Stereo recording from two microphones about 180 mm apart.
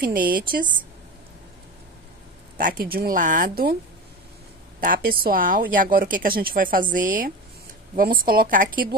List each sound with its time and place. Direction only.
0.0 s speech: 50° right (ahead or behind)
2.5 s speech: 55° right (ahead or behind)
4.7 s speech: 50° right (ahead or behind)